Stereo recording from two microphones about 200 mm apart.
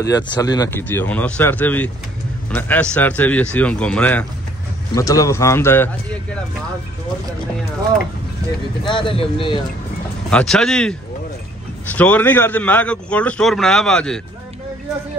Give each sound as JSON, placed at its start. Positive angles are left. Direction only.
{"t": 0.0, "sound": "a man's voice", "side_deg": 15}
{"t": 8.8, "sound": "speech", "side_deg": 25}
{"t": 10.3, "sound": "a man's voice", "side_deg": 5}